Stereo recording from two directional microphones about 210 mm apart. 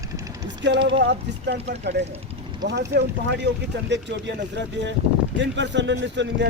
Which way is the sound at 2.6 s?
55° right (ahead or behind).